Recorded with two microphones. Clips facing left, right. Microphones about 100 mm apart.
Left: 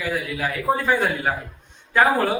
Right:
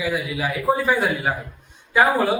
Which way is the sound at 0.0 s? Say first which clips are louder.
Right 1 dB; 5° right (ahead or behind).